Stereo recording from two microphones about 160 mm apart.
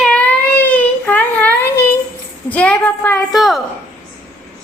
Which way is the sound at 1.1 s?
10° left (ahead or behind).